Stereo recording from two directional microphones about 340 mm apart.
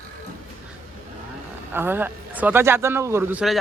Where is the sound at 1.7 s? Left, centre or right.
Centre.